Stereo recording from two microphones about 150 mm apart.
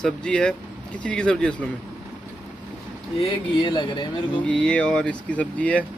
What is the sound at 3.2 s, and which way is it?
Speech, 30° left (ahead or behind).